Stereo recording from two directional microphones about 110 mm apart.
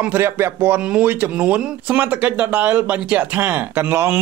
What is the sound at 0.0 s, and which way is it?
Speech, 20° right (ahead or behind).